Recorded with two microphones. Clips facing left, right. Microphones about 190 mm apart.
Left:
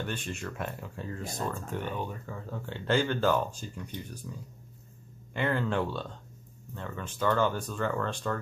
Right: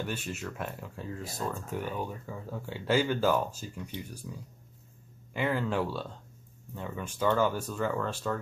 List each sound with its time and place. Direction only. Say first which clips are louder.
0.0 s speech: even; 5° right (ahead or behind)